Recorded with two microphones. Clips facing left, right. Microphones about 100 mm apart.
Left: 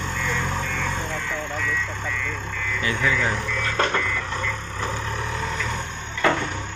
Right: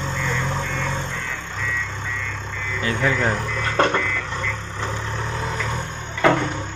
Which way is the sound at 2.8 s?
40° right (ahead or behind).